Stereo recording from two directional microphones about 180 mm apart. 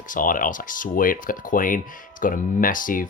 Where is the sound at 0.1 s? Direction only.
50° left (ahead or behind).